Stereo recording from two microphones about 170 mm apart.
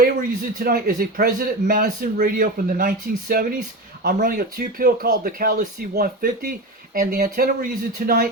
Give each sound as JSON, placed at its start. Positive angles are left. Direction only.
{"t": 0.0, "sound": "speech", "side_deg": -60}
{"t": 7.1, "sound": "speech", "side_deg": -50}